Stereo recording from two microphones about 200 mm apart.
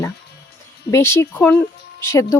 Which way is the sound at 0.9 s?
15° left (ahead or behind).